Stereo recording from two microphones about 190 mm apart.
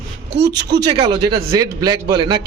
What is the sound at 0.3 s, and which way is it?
Speech, 60° right (ahead or behind).